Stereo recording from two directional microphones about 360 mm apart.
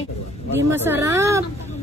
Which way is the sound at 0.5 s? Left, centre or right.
Centre.